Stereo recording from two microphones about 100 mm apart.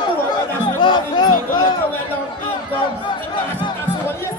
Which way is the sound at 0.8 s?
50° left (ahead or behind).